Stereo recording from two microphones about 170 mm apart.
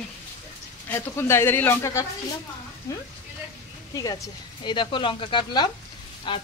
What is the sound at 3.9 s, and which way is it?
Speech, 20° left (ahead or behind).